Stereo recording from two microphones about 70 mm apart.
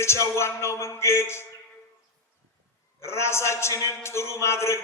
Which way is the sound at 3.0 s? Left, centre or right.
Left.